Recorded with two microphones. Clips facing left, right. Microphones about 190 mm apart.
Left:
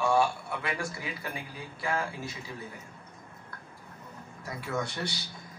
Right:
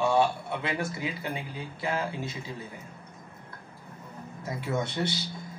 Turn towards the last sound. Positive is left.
turn(degrees=-25)  # may be behind; listen again after turning